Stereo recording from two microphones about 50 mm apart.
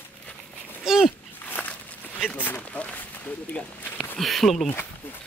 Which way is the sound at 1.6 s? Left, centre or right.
Left.